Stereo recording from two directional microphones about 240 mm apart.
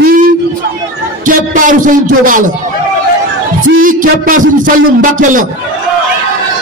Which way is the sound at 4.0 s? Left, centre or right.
Right.